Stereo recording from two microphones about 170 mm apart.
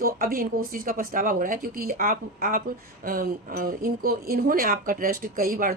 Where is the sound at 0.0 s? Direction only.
60° right (ahead or behind).